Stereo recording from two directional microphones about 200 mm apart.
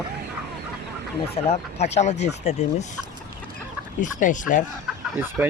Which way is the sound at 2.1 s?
60° left (ahead or behind).